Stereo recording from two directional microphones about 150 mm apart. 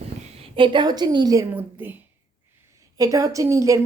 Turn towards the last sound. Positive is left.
turn(degrees=-20)  # may be behind; listen again after turning